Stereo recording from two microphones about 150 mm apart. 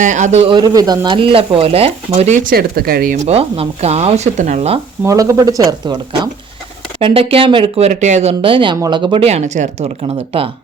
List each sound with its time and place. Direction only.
0.0 s speech: 55° right (ahead or behind)
0.5 s speech: 25° right (ahead or behind); by 3.2 s 80° right
3.2 s speech: 40° right (ahead or behind)
5.0 s speech: 20° right (ahead or behind)
7.0 s speech: 40° right (ahead or behind)